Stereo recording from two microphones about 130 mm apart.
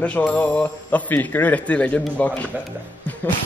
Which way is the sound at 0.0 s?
10° left (ahead or behind).